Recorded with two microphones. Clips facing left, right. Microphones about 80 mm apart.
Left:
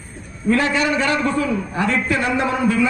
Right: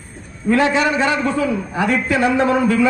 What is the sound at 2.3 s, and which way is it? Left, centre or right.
Speech, right.